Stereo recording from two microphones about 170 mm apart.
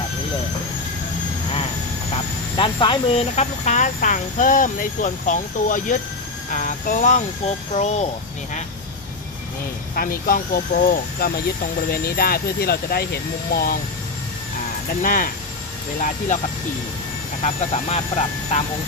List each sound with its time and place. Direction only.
2.6 s speech: 30° left (ahead or behind)
9.9 s speech: 55° left (ahead or behind)
15.0 s speech: 55° left (ahead or behind)
17.4 s speech: 40° left (ahead or behind)